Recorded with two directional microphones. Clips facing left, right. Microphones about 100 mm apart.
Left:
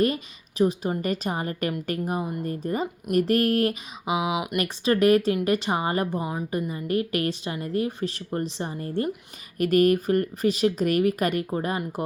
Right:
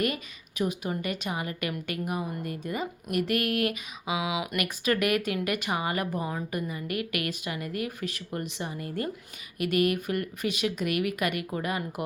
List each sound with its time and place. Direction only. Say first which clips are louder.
0.0 s a woman's voice: left 6 dB; 30° left (ahead or behind)